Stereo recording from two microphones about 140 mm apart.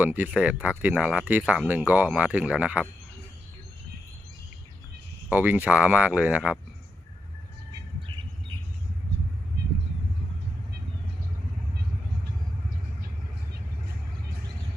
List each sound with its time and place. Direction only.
0.0 s speech: 10° right (ahead or behind)
5.3 s speech: 10° right (ahead or behind)
7.7 s bird: 35° right (ahead or behind)